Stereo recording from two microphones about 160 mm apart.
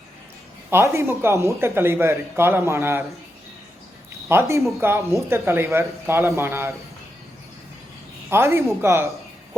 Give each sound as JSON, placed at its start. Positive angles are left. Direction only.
{"t": 0.7, "sound": "speech", "side_deg": -15}
{"t": 4.3, "sound": "speech", "side_deg": -15}
{"t": 8.3, "sound": "speech", "side_deg": -15}